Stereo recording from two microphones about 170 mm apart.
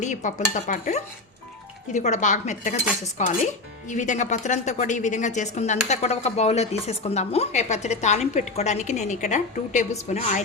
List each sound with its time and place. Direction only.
0.0 s speech: 45° left (ahead or behind)